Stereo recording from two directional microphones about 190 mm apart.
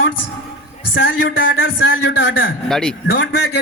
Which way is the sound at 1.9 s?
70° left (ahead or behind).